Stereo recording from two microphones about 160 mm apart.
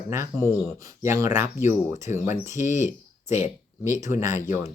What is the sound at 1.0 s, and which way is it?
Speech, 20° right (ahead or behind).